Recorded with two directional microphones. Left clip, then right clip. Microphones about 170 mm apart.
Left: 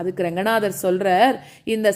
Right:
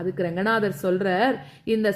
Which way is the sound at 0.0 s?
25° left (ahead or behind).